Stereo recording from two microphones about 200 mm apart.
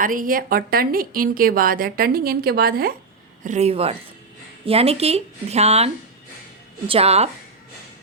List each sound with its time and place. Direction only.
0.0 s a woman's voice: 45° right (ahead or behind)
3.4 s speech: 35° right (ahead or behind)